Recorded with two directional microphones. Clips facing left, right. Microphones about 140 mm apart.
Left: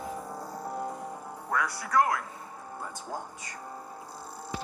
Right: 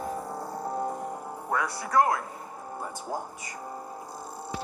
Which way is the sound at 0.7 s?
30° right (ahead or behind).